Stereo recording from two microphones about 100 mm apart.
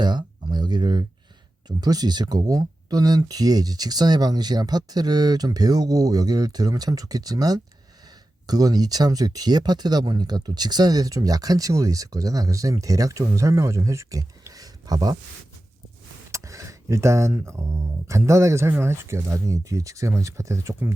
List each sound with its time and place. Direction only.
0.0 s a sound: 50° right (ahead or behind)
1.6 s speech: 40° right (ahead or behind)
16.3 s speech: 30° right (ahead or behind)